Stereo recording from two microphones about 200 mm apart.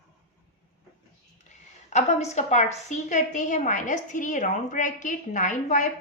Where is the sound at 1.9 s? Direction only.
35° left (ahead or behind).